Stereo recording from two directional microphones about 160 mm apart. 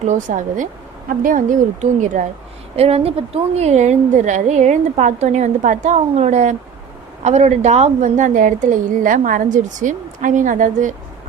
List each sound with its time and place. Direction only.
0.0 s a woman's voice: 50° right (ahead or behind)
2.7 s a woman's voice: 40° right (ahead or behind)